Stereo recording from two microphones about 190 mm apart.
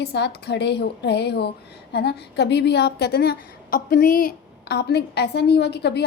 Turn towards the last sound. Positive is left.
turn(degrees=60)  # may be behind; listen again after turning